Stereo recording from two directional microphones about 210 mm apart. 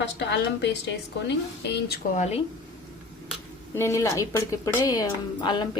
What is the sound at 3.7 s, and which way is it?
A woman's voice, 15° left (ahead or behind).